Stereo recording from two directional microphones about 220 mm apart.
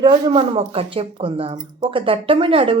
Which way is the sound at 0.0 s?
20° right (ahead or behind).